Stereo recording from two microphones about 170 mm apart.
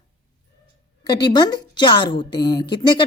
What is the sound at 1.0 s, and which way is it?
A woman's voice, 25° left (ahead or behind).